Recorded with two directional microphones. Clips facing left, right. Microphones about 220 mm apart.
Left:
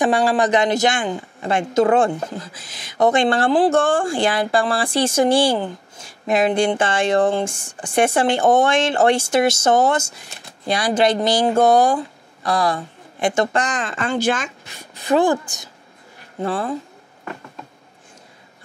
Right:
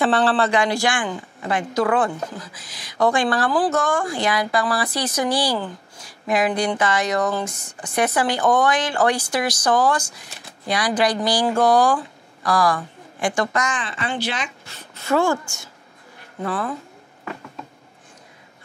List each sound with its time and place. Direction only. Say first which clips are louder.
0.0 s speech: left 2 dB; 10° left (ahead or behind); by 14.5 s 45° left (ahead or behind)
14.6 s speech: left 2 dB; 15° left (ahead or behind)